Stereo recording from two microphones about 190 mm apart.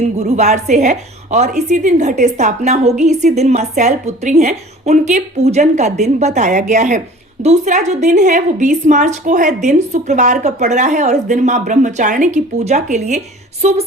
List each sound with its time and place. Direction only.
0.2 s a woman's voice: 35° right (ahead or behind)